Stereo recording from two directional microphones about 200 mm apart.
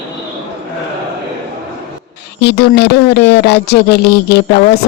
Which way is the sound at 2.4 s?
55° left (ahead or behind).